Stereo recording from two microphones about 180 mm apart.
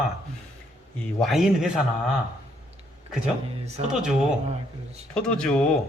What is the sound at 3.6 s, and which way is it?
Speech, 35° right (ahead or behind).